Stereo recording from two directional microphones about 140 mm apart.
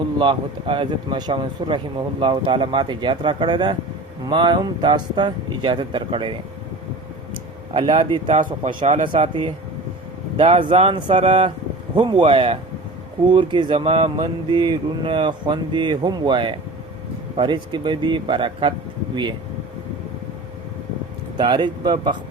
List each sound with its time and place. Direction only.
0.2 s speech: 35° right (ahead or behind)
7.7 s speech: 40° right (ahead or behind)
8.3 s speech: 60° right (ahead or behind)
10.3 s speech: 40° right (ahead or behind)
11.2 s speech: 50° right (ahead or behind)
11.9 s speech: 35° right (ahead or behind)
21.3 s speech: 35° right (ahead or behind)